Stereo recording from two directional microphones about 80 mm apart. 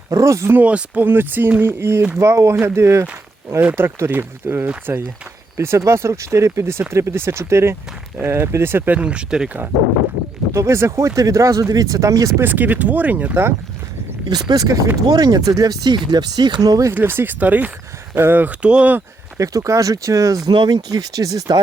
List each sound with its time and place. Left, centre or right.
0.1 s speech: right
0.5 s speech: centre
10.5 s speech: right
12.4 s speech: right
14.3 s speech: right
14.9 s speech: right
16.9 s speech: right
19.4 s speech: right
20.5 s speech: right